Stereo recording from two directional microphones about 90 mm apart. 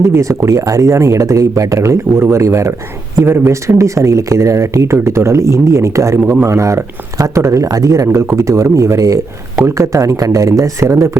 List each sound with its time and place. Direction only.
0.1 s speech: 35° right (ahead or behind)